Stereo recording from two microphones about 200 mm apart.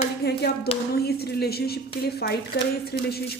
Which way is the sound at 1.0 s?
50° left (ahead or behind).